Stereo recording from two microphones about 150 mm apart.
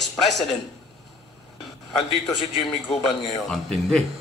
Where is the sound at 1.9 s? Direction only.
Centre (ahead or behind).